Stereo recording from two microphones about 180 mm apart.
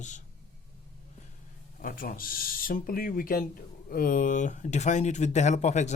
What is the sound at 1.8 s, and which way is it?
Speech, 50° left (ahead or behind).